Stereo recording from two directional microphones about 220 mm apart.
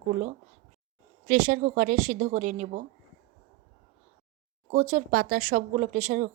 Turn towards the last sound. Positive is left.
turn(degrees=-30)  # may be behind; listen again after turning